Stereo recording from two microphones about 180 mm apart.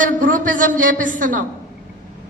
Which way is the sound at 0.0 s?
45° right (ahead or behind).